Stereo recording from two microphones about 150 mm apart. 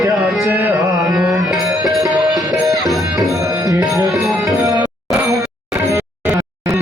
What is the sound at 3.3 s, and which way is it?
Music, 20° right (ahead or behind).